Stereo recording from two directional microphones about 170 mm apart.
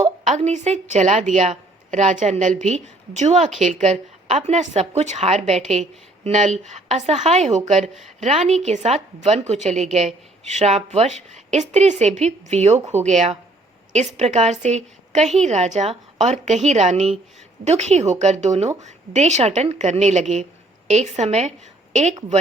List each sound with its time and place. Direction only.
0.3 s a woman's voice: 45° right (ahead or behind)